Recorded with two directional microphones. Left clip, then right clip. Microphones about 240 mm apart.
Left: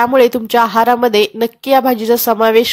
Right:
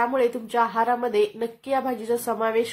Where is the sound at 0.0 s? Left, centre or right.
Left.